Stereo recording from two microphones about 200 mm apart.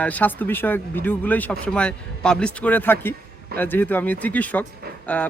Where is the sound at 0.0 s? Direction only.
10° left (ahead or behind).